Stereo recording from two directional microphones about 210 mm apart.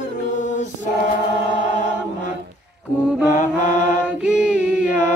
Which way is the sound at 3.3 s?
35° left (ahead or behind).